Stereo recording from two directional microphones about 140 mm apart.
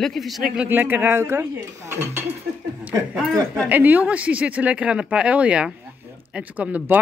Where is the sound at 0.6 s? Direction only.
15° right (ahead or behind).